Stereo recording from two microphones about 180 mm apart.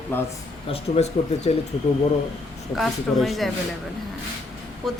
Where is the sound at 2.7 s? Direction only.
Centre (ahead or behind).